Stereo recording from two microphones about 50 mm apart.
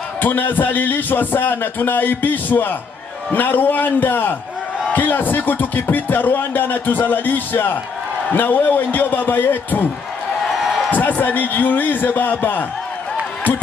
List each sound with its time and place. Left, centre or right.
0.2 s speech: left
10.9 s speech: left